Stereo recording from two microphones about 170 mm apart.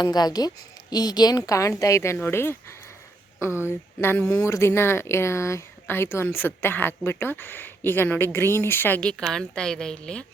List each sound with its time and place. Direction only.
0.0 s a woman's voice: 25° left (ahead or behind); by 10.2 s 5° left (ahead or behind)